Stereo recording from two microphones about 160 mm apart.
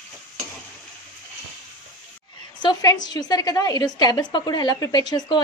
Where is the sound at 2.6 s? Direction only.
25° left (ahead or behind).